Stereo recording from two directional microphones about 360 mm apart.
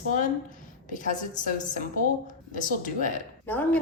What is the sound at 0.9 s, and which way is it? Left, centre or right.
A woman's voice, left.